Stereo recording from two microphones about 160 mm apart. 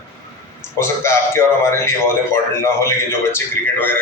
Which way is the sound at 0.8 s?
15° left (ahead or behind).